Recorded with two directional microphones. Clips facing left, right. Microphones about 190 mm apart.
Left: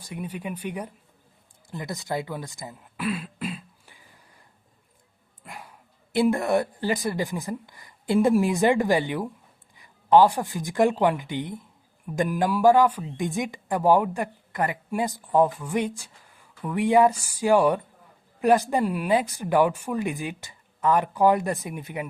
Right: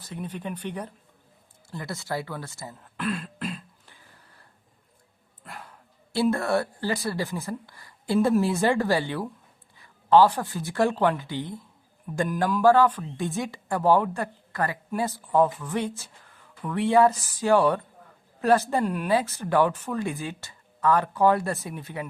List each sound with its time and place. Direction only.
0.0 s a woman's voice: 10° left (ahead or behind)
1.7 s throat clearing: 15° left (ahead or behind)
5.4 s dog: 10° left (ahead or behind)
6.1 s a woman's voice: 15° left (ahead or behind)